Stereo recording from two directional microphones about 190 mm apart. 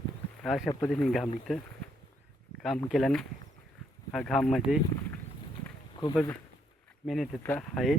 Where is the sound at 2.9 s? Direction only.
Centre (ahead or behind).